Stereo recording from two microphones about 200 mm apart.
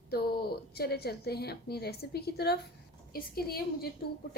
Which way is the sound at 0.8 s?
50° left (ahead or behind).